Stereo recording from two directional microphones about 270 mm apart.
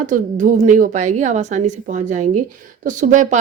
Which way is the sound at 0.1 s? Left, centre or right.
Right.